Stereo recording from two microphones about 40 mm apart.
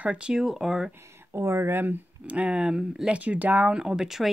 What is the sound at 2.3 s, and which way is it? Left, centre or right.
Speech, right.